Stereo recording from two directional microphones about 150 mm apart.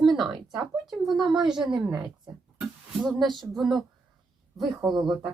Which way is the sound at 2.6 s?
Centre (ahead or behind).